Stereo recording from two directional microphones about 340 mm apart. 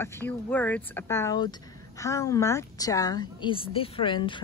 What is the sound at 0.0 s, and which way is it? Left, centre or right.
Speech, centre.